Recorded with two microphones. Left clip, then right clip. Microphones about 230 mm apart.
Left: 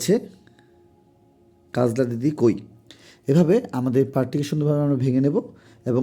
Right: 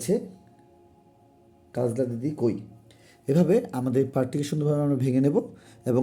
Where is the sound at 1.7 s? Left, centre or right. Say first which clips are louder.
Left 5 dB; left; by 6.0 s centre.